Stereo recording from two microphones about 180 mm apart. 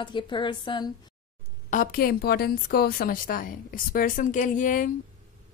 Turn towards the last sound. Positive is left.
turn(degrees=45)  # may be behind; listen again after turning